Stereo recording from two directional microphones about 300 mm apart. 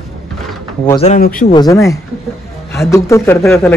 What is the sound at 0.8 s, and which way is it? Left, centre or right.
Speech, left.